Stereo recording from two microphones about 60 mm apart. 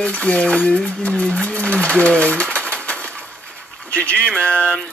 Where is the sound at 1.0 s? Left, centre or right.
Left.